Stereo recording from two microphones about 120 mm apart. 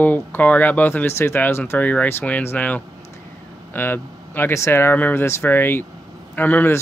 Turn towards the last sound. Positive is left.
turn(degrees=15)  # may be behind; listen again after turning